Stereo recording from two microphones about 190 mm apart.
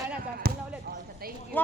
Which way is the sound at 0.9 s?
55° right (ahead or behind).